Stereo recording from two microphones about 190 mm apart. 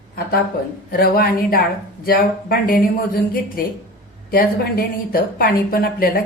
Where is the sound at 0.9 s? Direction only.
50° left (ahead or behind).